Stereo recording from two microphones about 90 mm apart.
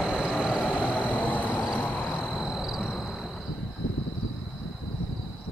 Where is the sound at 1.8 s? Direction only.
15° left (ahead or behind).